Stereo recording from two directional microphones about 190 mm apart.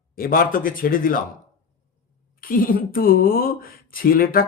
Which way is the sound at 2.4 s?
50° left (ahead or behind).